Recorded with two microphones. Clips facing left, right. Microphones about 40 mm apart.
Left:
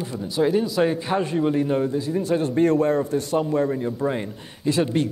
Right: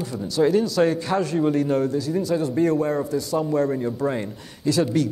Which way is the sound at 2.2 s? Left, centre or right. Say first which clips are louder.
Left 3 dB; left.